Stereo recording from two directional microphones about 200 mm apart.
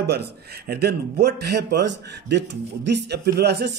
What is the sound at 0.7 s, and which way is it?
A man's voice, 55° right (ahead or behind).